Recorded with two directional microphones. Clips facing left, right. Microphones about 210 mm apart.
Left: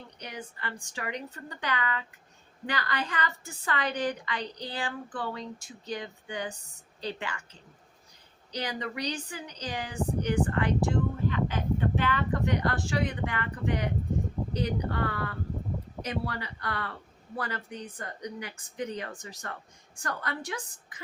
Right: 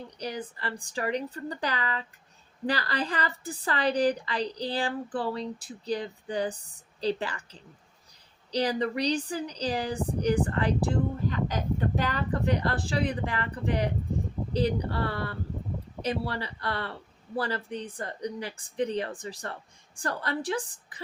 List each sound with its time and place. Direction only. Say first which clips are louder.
0.2 s speech: right 6 dB; 35° right (ahead or behind)
8.5 s speech: right 7 dB; 35° right (ahead or behind)